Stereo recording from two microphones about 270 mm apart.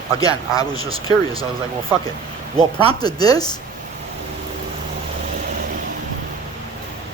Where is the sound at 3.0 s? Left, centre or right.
Centre.